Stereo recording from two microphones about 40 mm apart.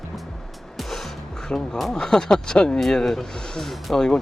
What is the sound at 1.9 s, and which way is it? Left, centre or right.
Speech, centre.